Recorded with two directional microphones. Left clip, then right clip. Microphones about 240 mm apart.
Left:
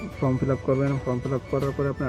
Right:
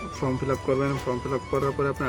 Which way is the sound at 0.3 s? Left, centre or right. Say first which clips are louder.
Left 1 dB; centre.